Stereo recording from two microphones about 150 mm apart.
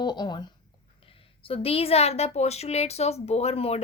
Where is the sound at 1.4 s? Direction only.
40° left (ahead or behind).